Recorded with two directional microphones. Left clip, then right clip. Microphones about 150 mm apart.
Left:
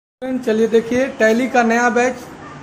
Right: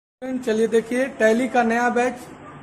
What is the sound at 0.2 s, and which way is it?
A woman's voice, 15° left (ahead or behind).